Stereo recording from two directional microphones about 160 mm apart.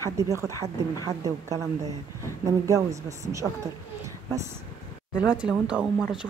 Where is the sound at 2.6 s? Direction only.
20° right (ahead or behind).